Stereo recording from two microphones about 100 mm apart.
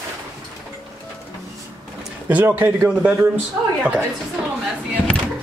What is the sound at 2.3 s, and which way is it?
Speech, 20° right (ahead or behind).